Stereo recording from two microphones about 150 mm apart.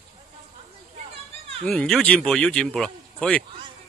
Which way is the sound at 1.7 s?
Centre (ahead or behind).